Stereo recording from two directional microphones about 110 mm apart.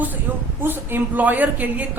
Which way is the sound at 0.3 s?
15° right (ahead or behind).